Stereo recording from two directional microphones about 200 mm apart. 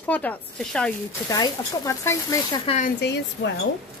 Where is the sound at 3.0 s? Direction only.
60° left (ahead or behind).